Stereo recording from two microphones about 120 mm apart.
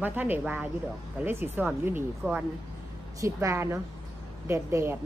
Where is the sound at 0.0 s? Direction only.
15° right (ahead or behind).